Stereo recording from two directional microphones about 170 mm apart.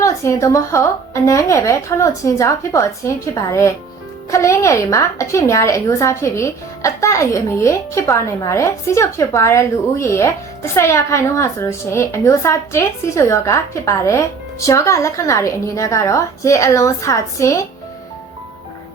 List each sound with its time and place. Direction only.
0.0 s a woman's voice: 15° left (ahead or behind)